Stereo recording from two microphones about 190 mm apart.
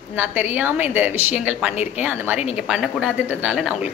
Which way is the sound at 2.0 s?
10° right (ahead or behind).